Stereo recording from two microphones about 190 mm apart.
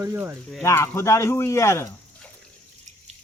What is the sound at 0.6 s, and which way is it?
Speech, 15° left (ahead or behind).